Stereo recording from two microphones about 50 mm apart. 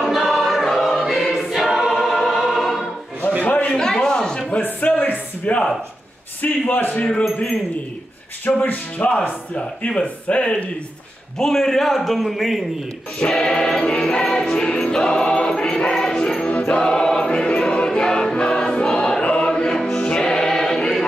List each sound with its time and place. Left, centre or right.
0.0 s choir: centre
3.3 s a sound: left
3.7 s a sound: centre
4.6 s a sound: left
5.5 s speech: left
6.7 s speech: left
8.5 s speech: left
9.6 s speech: left
11.3 s a man's voice: centre
13.3 s music: centre
16.7 s choir: centre